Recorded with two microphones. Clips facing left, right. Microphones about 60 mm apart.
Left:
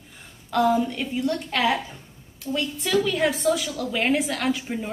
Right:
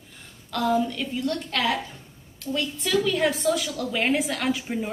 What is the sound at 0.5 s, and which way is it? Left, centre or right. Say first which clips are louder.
A woman's voice: left 3 dB; centre.